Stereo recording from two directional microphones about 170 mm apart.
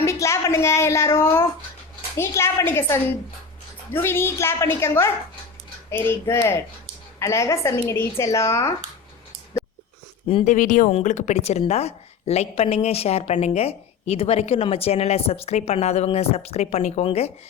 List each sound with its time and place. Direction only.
0.0 s speech: 15° left (ahead or behind)
4.0 s speech: 15° left (ahead or behind)
10.4 s a woman's voice: 50° left (ahead or behind)